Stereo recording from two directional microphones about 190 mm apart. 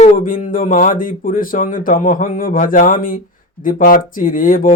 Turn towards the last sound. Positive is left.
turn(degrees=45)  # may be behind; listen again after turning